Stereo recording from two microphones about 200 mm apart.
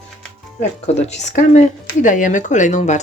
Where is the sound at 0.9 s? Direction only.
35° left (ahead or behind).